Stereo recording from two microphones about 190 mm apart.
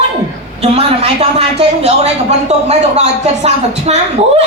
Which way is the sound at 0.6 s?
35° right (ahead or behind).